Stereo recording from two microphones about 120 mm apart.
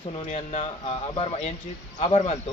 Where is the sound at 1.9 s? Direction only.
55° left (ahead or behind).